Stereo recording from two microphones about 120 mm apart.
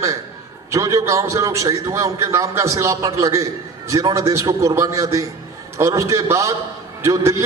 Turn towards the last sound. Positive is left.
turn(degrees=-25)  # may be behind; listen again after turning